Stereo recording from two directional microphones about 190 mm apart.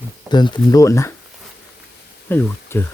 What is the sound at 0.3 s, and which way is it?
Speech, 25° left (ahead or behind).